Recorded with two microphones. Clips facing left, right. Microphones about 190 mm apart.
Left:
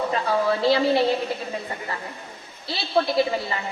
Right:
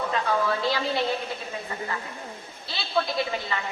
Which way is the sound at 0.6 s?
35° left (ahead or behind).